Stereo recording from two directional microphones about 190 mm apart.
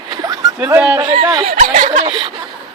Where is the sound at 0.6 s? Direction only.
10° right (ahead or behind).